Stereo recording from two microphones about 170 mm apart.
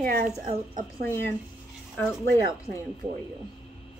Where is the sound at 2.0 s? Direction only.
10° left (ahead or behind).